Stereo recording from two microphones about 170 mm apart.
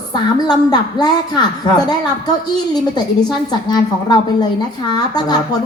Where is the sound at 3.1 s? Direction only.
25° left (ahead or behind).